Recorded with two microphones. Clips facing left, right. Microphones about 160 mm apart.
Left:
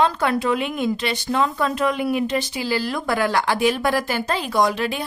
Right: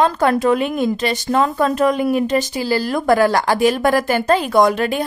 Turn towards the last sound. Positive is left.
turn(degrees=-50)  # may be behind; listen again after turning